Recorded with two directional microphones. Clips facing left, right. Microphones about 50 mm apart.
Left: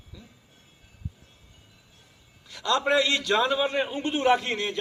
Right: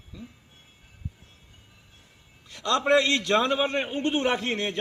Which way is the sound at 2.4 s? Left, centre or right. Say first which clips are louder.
Right 1 dB; right.